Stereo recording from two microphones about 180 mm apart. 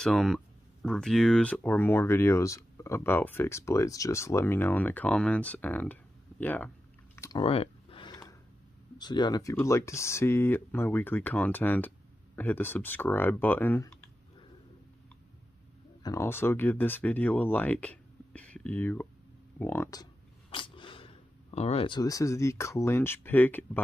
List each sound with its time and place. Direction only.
0.0 s speech: centre (ahead or behind)
7.2 s chewing: 20° left (ahead or behind)
7.4 s a sound: 30° left (ahead or behind)
8.9 s speech: 25° left (ahead or behind)
16.0 s speech: 15° left (ahead or behind)